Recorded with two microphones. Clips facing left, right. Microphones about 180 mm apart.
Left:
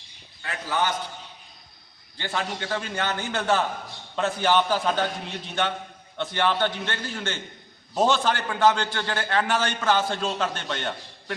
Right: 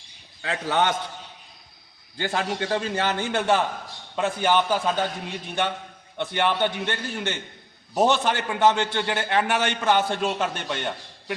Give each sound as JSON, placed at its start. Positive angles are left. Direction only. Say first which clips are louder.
{"t": 0.4, "sound": "a man's voice", "louder": "right 4 dB", "side_deg": -85}
{"t": 2.1, "sound": "a man's voice", "louder": "right 4 dB", "side_deg": -45}
{"t": 4.1, "sound": "a man's voice", "louder": "even", "side_deg": -10}
{"t": 6.1, "sound": "a man's voice", "louder": "right 1 dB", "side_deg": -15}